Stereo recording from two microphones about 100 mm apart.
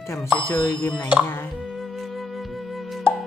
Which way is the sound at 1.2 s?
20° left (ahead or behind).